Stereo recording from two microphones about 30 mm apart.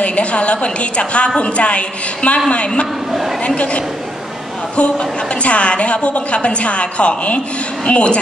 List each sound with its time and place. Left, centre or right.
0.0 s a woman's voice: left
3.1 s a woman's voice: centre
3.4 s a woman's voice: left